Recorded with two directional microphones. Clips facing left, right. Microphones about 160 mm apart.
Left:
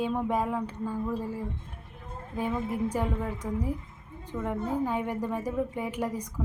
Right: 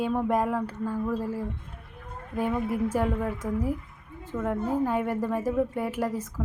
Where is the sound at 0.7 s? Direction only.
15° left (ahead or behind).